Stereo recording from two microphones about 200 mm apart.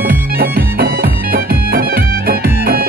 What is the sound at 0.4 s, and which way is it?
Music, 50° right (ahead or behind).